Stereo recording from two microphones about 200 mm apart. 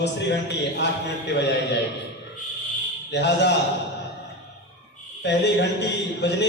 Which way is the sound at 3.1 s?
60° left (ahead or behind).